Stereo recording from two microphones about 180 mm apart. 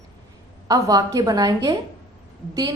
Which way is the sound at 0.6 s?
20° right (ahead or behind).